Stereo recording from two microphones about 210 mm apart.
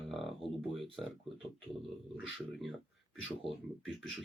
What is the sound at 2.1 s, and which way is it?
Speech, centre (ahead or behind).